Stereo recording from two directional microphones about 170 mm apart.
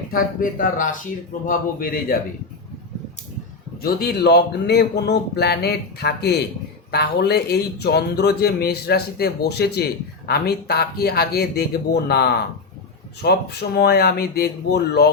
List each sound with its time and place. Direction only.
0.1 s speech: 55° left (ahead or behind)
3.8 s speech: 65° left (ahead or behind)